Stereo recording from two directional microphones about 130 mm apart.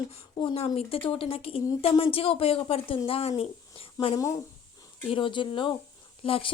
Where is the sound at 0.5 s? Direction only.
50° left (ahead or behind).